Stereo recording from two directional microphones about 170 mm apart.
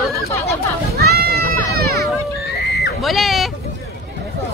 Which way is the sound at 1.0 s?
65° right (ahead or behind).